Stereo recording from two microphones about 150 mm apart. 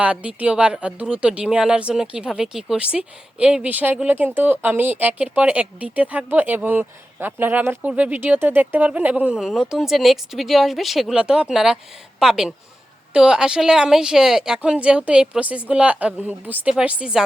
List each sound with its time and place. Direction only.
0.0 s a woman's voice: 10° right (ahead or behind)